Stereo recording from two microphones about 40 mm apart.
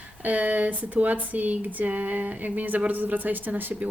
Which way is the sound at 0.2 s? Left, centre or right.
Right.